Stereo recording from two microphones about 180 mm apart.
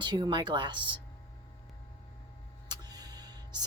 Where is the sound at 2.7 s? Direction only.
20° right (ahead or behind).